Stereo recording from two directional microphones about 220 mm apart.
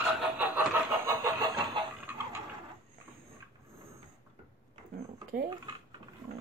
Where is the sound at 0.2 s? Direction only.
10° right (ahead or behind).